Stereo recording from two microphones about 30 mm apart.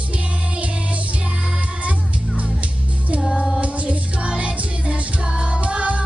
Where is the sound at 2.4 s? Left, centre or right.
Right.